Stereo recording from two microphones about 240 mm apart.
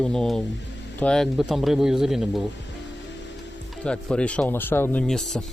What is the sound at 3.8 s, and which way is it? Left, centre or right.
Speech, centre.